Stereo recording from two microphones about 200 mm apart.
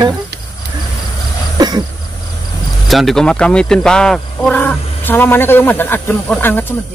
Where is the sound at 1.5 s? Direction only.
20° right (ahead or behind).